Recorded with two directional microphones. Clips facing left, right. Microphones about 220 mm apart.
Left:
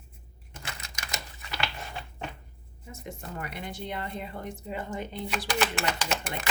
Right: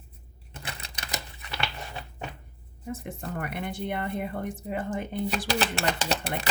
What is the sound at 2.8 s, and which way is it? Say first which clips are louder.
Speech: right 6 dB; 55° right (ahead or behind).